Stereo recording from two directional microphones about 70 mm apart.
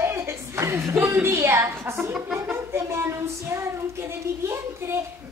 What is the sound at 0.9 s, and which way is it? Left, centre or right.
A woman's voice, right.